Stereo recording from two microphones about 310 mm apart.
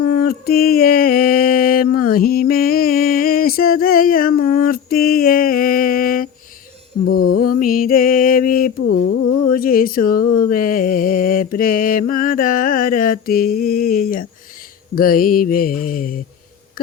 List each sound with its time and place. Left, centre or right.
0.0 s mantra: left
7.0 s music: left
7.6 s mantra: left
8.8 s mantra: left
9.5 s a sound: left
10.5 s mantra: left